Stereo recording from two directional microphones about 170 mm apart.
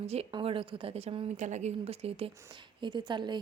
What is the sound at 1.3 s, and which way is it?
A woman's voice, 45° right (ahead or behind).